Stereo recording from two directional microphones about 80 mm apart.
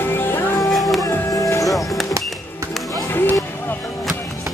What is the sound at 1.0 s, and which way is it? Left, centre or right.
Music, left.